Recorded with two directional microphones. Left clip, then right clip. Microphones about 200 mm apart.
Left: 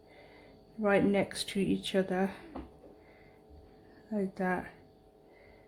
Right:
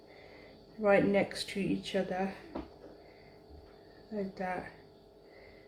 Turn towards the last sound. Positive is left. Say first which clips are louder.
# left 3 dB
turn(degrees=55)  # may be behind; listen again after turning